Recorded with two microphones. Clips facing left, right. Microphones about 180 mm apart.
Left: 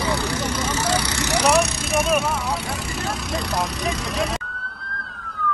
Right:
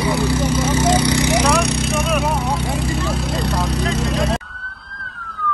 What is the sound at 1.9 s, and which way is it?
Vehicle, 35° right (ahead or behind).